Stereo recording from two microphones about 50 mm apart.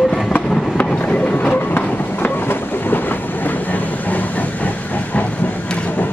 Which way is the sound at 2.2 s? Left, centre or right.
Left.